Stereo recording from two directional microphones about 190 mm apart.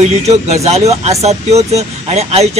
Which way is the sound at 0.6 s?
35° right (ahead or behind).